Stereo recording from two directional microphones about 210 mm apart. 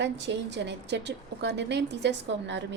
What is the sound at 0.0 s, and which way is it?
A woman's voice, 55° right (ahead or behind).